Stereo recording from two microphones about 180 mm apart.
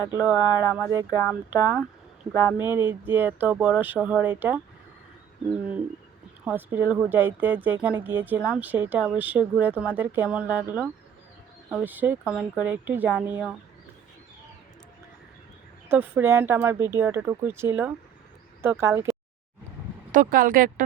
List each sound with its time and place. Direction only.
0.2 s speech: 10° right (ahead or behind)
6.4 s speech: 10° right (ahead or behind)
15.9 s speech: 10° right (ahead or behind)
20.1 s speech: 50° right (ahead or behind)